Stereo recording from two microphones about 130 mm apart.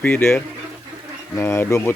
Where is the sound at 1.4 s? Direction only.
20° left (ahead or behind).